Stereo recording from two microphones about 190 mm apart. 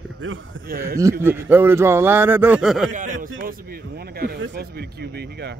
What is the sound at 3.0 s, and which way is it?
A man's voice, 45° right (ahead or behind).